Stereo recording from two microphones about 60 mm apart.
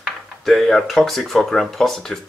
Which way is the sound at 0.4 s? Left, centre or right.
Centre.